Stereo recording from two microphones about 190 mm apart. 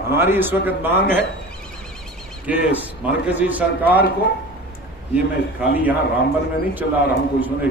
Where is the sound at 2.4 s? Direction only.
10° right (ahead or behind).